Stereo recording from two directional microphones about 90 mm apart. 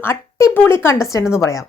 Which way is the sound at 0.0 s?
30° left (ahead or behind).